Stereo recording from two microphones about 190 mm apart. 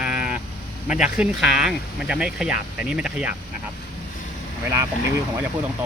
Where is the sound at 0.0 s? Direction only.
5° right (ahead or behind).